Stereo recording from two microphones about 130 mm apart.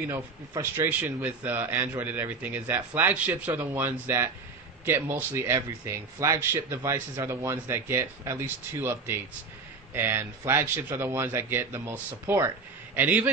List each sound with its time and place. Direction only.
0.1 s a man's voice: 20° right (ahead or behind)